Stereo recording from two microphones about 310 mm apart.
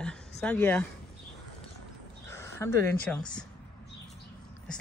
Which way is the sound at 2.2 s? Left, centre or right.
Centre.